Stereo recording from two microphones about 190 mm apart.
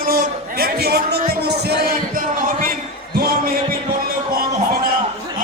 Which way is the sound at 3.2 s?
50° right (ahead or behind).